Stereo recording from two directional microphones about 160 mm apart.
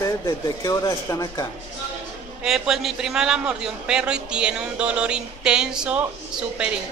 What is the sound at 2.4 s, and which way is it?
A woman's voice, 5° right (ahead or behind).